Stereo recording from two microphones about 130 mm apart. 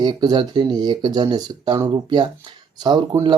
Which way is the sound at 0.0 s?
35° right (ahead or behind).